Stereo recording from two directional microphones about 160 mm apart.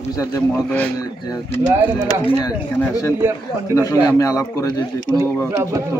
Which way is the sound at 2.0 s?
25° left (ahead or behind).